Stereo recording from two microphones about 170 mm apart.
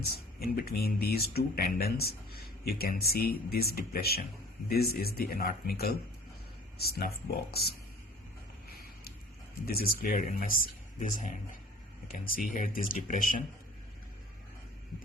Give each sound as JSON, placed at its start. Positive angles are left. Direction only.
{"t": 0.1, "sound": "speech", "side_deg": 65}
{"t": 9.6, "sound": "speech", "side_deg": 65}